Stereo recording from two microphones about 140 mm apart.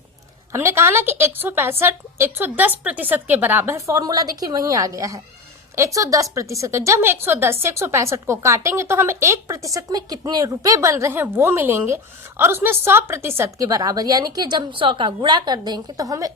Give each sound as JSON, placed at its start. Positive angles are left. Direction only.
{"t": 0.5, "sound": "a woman's voice", "side_deg": -20}